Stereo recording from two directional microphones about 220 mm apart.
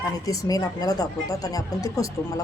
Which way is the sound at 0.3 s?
15° left (ahead or behind).